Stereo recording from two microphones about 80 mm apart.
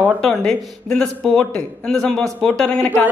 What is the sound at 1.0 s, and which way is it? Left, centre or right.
A man's voice, centre.